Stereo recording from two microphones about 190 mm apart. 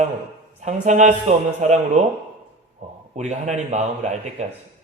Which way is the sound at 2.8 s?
35° right (ahead or behind).